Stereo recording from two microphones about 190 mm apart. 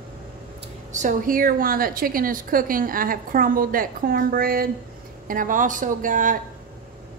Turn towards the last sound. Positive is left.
turn(degrees=-45)  # may be behind; listen again after turning